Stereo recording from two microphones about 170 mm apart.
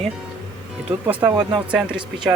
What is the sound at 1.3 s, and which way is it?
Speech, 25° right (ahead or behind).